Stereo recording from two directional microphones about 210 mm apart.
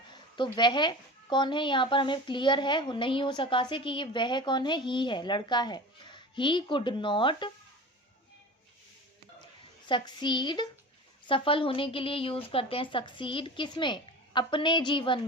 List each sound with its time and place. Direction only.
0.1 s a woman's voice: 20° left (ahead or behind)
9.8 s a woman's voice: 20° left (ahead or behind)